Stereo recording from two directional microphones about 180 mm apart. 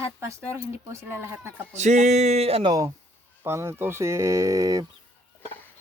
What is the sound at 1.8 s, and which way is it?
Speech, 40° right (ahead or behind).